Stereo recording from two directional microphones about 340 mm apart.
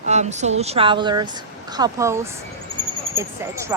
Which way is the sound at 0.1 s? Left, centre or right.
Centre.